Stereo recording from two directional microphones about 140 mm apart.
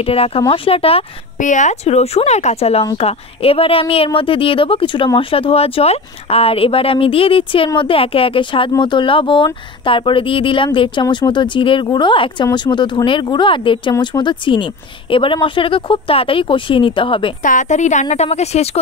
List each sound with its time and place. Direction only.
0.0 s speech: 45° left (ahead or behind)
1.4 s a woman's voice: 65° left (ahead or behind); by 17.3 s 35° left (ahead or behind)
17.4 s a woman's voice: 65° left (ahead or behind); by 18.8 s 50° left (ahead or behind)